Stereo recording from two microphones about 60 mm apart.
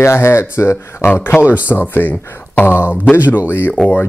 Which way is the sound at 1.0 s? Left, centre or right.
Left.